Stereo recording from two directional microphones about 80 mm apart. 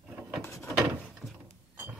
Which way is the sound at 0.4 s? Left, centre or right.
Left.